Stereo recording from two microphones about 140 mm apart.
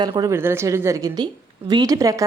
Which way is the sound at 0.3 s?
15° right (ahead or behind).